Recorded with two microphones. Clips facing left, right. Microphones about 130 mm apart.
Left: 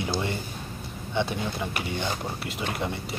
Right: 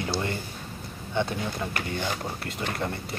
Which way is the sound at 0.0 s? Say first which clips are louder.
Left 1 dB; 15° left (ahead or behind).